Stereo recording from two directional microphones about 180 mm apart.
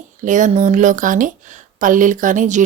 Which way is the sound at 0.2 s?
45° right (ahead or behind).